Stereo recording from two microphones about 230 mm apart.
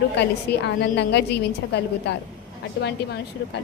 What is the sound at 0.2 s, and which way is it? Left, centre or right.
A woman's voice, left.